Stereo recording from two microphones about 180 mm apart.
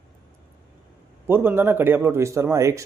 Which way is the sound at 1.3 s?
10° right (ahead or behind).